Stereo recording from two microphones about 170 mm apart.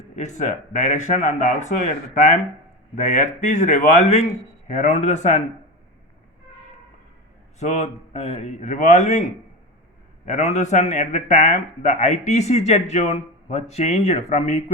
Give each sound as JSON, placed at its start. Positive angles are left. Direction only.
{"t": 0.2, "sound": "a man's voice", "side_deg": 45}
{"t": 7.6, "sound": "speech", "side_deg": 40}
{"t": 10.2, "sound": "a man's voice", "side_deg": 45}